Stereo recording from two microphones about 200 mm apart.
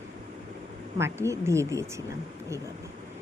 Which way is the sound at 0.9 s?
15° right (ahead or behind).